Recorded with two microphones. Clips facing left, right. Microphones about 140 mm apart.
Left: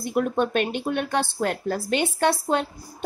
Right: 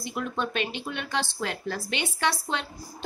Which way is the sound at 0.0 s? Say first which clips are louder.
Left 8 dB; 50° left (ahead or behind).